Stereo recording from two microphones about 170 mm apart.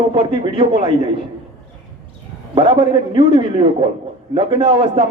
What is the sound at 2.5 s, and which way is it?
A man's voice, 30° right (ahead or behind).